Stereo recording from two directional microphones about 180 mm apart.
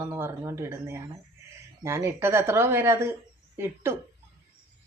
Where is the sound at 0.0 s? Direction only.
15° right (ahead or behind).